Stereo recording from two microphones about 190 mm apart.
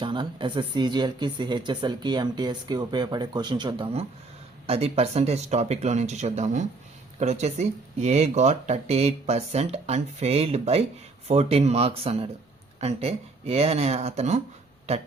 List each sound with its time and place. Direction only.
0.0 s speech: 25° right (ahead or behind)